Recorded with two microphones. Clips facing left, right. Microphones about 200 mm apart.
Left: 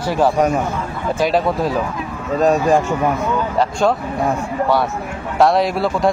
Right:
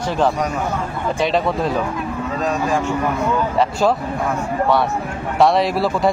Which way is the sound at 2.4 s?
45° left (ahead or behind).